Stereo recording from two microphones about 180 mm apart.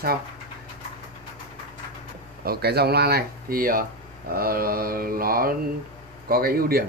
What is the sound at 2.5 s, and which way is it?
Speech, 65° right (ahead or behind).